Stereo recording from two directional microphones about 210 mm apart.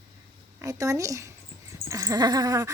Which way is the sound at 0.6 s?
15° right (ahead or behind).